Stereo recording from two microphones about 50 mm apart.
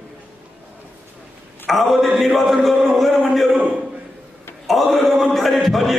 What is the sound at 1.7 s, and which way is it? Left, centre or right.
A man's voice, centre.